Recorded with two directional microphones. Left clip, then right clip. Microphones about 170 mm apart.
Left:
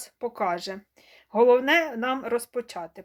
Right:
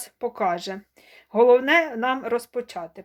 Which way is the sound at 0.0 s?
5° right (ahead or behind).